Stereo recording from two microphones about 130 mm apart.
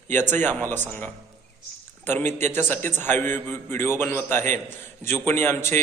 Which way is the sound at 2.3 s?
60° right (ahead or behind).